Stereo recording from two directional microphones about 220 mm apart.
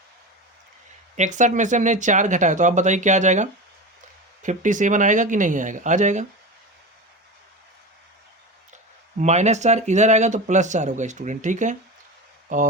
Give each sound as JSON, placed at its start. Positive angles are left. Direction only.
{"t": 1.1, "sound": "speech", "side_deg": -35}
{"t": 9.1, "sound": "speech", "side_deg": -30}